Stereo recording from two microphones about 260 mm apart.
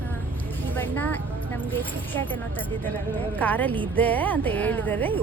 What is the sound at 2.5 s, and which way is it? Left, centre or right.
Speech, centre.